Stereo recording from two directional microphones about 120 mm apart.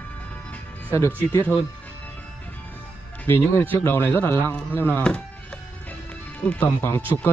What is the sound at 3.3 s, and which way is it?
Speech, 20° left (ahead or behind).